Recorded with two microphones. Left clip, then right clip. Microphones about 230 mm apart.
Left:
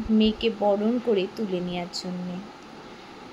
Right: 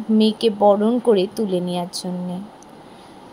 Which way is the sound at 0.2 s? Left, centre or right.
Right.